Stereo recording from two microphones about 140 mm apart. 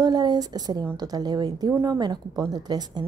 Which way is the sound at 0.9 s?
25° right (ahead or behind).